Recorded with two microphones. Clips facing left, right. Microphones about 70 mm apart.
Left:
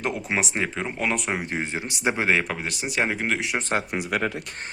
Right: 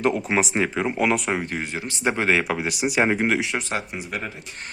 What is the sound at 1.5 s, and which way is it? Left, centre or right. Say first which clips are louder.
Speech: even; left.